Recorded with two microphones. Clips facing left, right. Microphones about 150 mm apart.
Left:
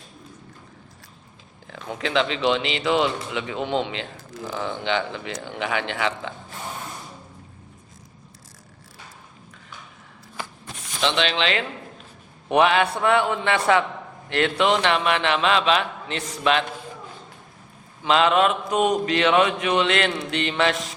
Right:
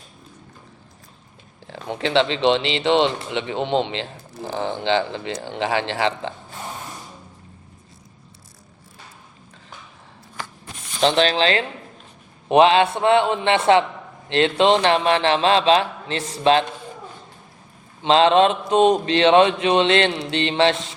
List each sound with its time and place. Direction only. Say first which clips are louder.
1.6 s speech: right 4 dB; 30° right (ahead or behind)
11.0 s speech: right 5 dB; 40° right (ahead or behind)
12.5 s mantra: right 4 dB; 25° right (ahead or behind)
14.3 s speech: right 4 dB; 25° right (ahead or behind)
18.0 s mantra: right 4 dB; 30° right (ahead or behind)